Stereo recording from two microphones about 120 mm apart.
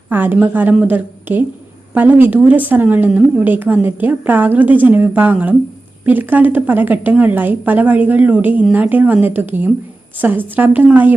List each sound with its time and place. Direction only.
0.1 s speech: 15° right (ahead or behind)